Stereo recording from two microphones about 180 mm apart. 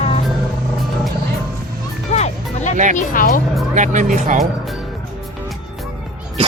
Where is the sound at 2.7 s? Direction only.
45° right (ahead or behind).